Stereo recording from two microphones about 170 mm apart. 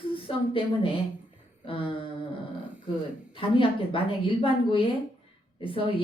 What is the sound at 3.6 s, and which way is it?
A woman's voice, 30° left (ahead or behind).